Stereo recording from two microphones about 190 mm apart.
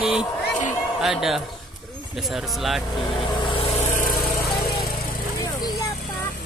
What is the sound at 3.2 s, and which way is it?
Vehicle, 25° left (ahead or behind).